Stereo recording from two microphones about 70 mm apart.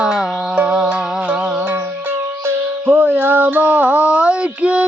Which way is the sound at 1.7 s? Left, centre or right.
Right.